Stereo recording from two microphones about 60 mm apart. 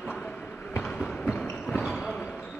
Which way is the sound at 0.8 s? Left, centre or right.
Centre.